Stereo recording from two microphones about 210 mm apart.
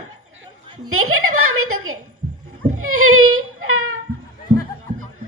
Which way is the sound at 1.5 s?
90° right.